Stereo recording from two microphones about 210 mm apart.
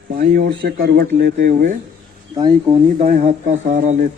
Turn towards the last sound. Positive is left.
turn(degrees=-35)  # may be behind; listen again after turning